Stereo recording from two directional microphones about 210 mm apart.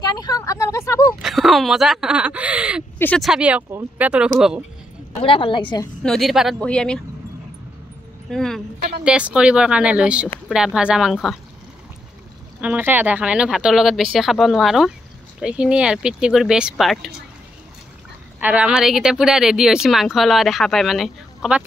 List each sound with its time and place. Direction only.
0.2 s a sound: 15° left (ahead or behind)
1.2 s speech: centre (ahead or behind)
5.2 s a woman's voice: 25° left (ahead or behind)
6.0 s speech: centre (ahead or behind)
8.3 s speech: centre (ahead or behind)
12.5 s speech: 5° right (ahead or behind)
18.4 s speech: 5° right (ahead or behind)